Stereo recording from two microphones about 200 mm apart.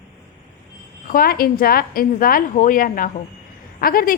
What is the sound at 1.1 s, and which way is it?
A woman's voice, 45° left (ahead or behind).